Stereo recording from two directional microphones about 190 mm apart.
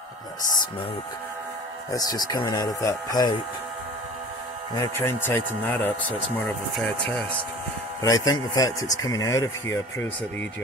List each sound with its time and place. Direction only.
1.9 s speech: 20° left (ahead or behind)
4.7 s a man's voice: 10° left (ahead or behind)
8.0 s a man's voice: 20° left (ahead or behind)